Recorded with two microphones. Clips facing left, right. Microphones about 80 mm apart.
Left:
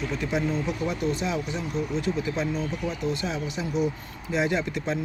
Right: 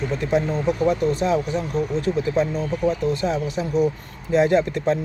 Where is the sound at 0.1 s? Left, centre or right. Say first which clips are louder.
Right 6 dB; right.